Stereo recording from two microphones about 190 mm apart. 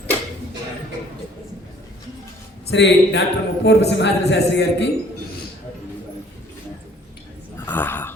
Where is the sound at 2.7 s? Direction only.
70° left (ahead or behind).